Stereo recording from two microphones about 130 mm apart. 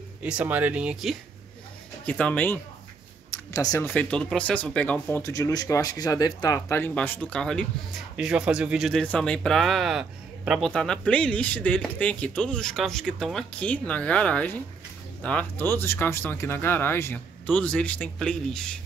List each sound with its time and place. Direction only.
0.2 s speech: 10° right (ahead or behind)
2.0 s a man's voice: 10° left (ahead or behind)
3.5 s speech: 25° left (ahead or behind)
3.9 s a man's voice: 10° left (ahead or behind)
6.9 s a man's voice: 10° left (ahead or behind)
8.2 s speech: 5° right (ahead or behind)
9.0 s a man's voice: 10° left (ahead or behind)